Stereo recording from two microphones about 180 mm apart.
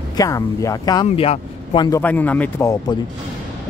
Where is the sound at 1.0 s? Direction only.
35° left (ahead or behind).